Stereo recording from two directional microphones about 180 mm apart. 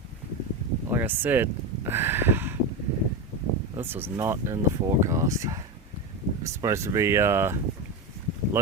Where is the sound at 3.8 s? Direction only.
10° right (ahead or behind).